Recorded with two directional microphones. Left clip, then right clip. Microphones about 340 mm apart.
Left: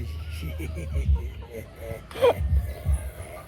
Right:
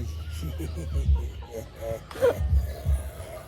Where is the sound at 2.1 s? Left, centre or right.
Right.